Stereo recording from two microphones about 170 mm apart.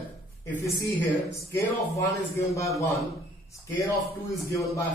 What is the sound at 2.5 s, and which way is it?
Speech, 20° left (ahead or behind).